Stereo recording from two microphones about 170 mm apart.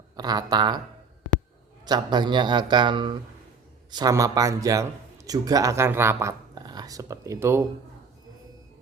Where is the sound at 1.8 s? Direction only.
25° right (ahead or behind).